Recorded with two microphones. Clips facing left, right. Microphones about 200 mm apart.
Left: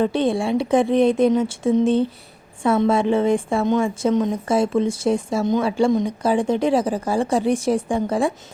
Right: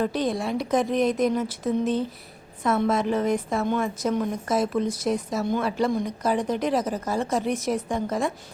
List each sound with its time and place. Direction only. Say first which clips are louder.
0.0 s a woman's voice: left 5 dB; 30° left (ahead or behind)